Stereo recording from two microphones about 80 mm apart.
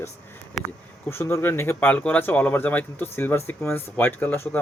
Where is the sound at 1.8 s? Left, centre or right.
Centre.